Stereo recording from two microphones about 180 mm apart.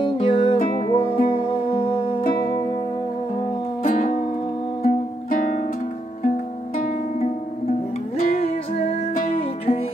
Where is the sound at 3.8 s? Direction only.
45° left (ahead or behind).